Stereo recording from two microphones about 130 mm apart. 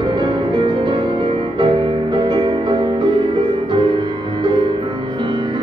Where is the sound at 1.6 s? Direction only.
35° right (ahead or behind).